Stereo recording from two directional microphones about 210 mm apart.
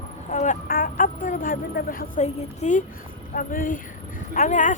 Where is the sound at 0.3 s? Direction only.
35° left (ahead or behind).